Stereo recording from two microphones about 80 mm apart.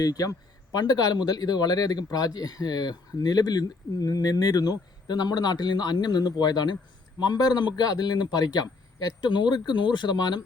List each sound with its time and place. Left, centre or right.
0.0 s speech: left